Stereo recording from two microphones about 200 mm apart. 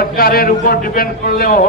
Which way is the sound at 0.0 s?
50° left (ahead or behind).